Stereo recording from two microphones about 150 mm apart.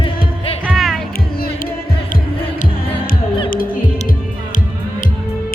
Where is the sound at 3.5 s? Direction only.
70° left (ahead or behind).